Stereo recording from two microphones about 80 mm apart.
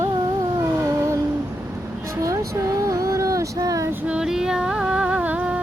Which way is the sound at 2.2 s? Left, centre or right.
Right.